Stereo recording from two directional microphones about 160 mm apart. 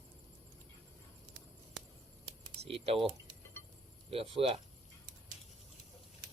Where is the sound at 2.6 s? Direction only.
35° right (ahead or behind).